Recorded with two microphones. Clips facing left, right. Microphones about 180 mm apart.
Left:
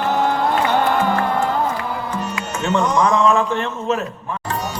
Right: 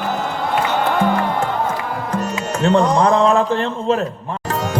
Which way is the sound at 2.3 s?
35° right (ahead or behind).